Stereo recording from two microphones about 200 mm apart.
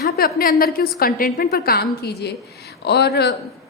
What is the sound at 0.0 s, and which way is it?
A woman's voice, 45° left (ahead or behind).